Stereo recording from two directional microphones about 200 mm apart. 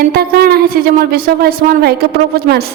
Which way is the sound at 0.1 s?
50° right (ahead or behind).